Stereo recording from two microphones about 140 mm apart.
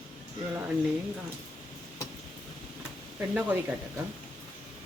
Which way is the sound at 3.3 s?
10° right (ahead or behind).